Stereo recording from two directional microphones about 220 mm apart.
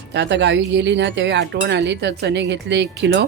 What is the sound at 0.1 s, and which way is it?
Speech, 55° right (ahead or behind).